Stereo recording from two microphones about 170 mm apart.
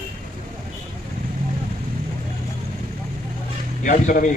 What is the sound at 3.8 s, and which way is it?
Speech, 50° left (ahead or behind).